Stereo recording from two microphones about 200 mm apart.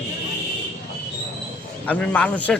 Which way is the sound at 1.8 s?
5° left (ahead or behind).